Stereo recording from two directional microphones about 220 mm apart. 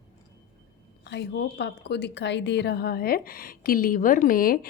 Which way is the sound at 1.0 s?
50° left (ahead or behind).